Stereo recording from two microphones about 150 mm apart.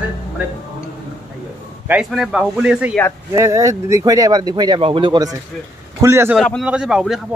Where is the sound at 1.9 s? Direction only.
5° right (ahead or behind).